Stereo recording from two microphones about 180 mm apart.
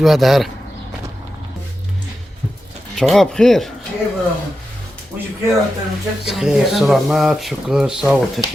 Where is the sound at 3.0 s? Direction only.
Centre (ahead or behind).